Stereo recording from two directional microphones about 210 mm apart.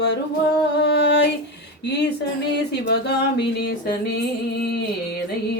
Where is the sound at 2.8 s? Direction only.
55° left (ahead or behind).